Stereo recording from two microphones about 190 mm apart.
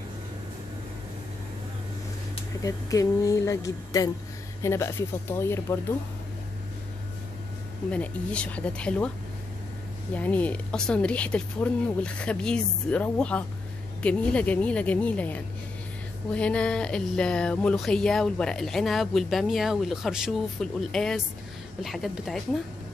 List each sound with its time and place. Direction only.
2.6 s speech: 15° left (ahead or behind)
7.9 s speech: 5° left (ahead or behind)
10.1 s speech: 10° left (ahead or behind)